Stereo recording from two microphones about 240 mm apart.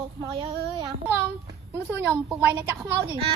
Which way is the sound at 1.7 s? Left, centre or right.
Centre.